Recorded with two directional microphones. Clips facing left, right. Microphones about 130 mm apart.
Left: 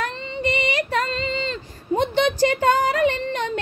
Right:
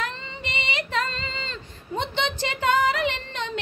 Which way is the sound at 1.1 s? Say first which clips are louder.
Left 9 dB; 35° right (ahead or behind).